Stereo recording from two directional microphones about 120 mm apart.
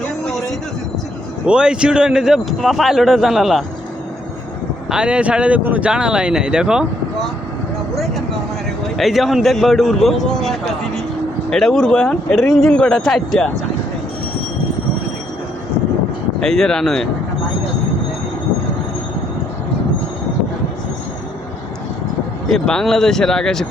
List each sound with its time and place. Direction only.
1.5 s a man's voice: 10° right (ahead or behind)
4.9 s speech: 10° right (ahead or behind)
7.9 s vehicle: centre (ahead or behind)
9.0 s a man's voice: centre (ahead or behind)
16.4 s a man's voice: 5° left (ahead or behind)
22.4 s a man's voice: 5° left (ahead or behind)